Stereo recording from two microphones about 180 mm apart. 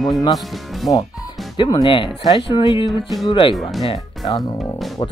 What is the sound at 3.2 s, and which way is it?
Speech, 30° left (ahead or behind).